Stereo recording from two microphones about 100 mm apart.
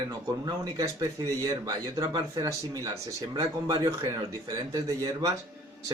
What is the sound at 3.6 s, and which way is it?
A man's voice, 45° right (ahead or behind).